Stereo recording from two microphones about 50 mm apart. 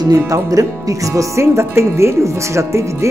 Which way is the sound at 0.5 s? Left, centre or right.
Right.